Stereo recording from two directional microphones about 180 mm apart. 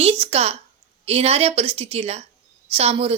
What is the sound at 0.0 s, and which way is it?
A woman's voice, 35° right (ahead or behind).